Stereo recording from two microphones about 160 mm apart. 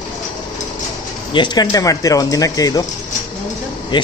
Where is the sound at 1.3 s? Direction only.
25° left (ahead or behind).